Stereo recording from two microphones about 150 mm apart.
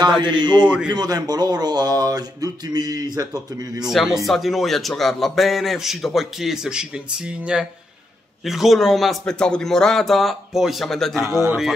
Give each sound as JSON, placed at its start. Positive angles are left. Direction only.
{"t": 0.2, "sound": "speech", "side_deg": -30}
{"t": 3.9, "sound": "a man's voice", "side_deg": 0}